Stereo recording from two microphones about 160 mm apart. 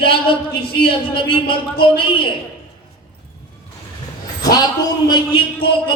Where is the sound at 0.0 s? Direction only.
35° left (ahead or behind).